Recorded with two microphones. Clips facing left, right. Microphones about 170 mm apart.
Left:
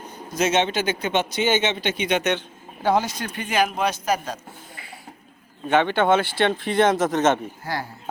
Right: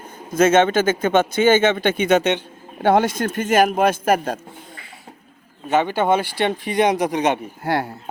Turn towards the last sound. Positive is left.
turn(degrees=-65)  # may be behind; listen again after turning